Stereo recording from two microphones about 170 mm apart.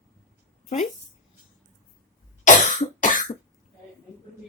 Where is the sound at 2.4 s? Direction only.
45° left (ahead or behind).